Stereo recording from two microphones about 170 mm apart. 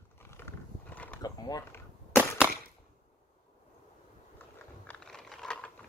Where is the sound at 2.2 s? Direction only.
10° right (ahead or behind).